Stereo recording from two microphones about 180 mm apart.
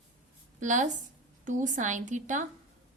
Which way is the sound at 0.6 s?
45° right (ahead or behind).